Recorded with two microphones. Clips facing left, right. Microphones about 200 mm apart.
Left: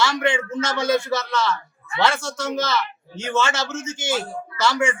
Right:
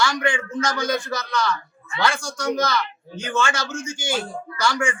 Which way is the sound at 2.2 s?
25° left (ahead or behind).